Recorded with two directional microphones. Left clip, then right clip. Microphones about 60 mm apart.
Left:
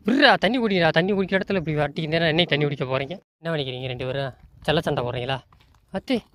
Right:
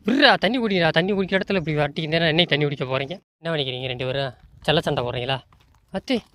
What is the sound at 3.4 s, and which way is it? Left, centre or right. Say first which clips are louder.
Speech: right 2 dB; right.